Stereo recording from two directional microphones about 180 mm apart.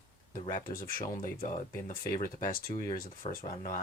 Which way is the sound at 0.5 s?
50° left (ahead or behind).